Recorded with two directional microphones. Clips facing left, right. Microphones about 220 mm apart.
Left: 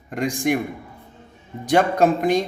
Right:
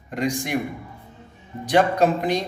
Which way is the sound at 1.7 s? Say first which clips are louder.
Left 1 dB; 50° left (ahead or behind).